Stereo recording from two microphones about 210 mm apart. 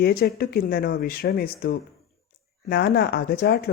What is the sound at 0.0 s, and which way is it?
Speech, 50° left (ahead or behind).